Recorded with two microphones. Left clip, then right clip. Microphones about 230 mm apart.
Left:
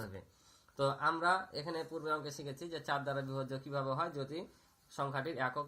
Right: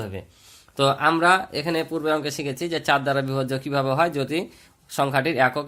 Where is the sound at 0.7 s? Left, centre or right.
Right.